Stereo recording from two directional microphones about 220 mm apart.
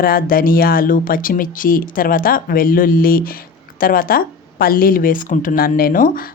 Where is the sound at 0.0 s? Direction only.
40° left (ahead or behind).